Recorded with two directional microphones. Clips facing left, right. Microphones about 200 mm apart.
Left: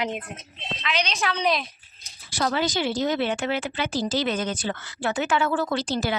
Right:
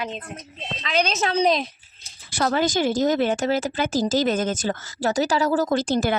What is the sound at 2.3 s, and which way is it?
Speech, 50° right (ahead or behind).